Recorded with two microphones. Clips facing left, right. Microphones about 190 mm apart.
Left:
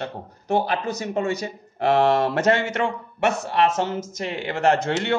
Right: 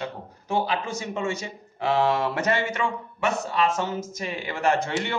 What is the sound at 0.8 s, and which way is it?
Speech, 40° left (ahead or behind).